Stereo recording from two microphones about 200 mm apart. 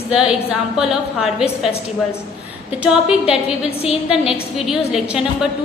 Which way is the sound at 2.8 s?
5° right (ahead or behind).